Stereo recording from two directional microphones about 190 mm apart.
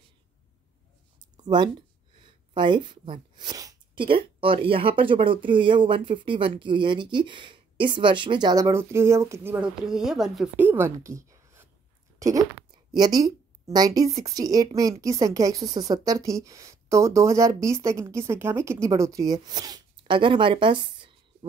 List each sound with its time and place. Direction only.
1.3 s a woman's voice: 20° right (ahead or behind)